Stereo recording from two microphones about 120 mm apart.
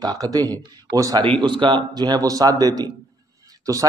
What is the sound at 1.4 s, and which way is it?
A man's voice, 40° right (ahead or behind).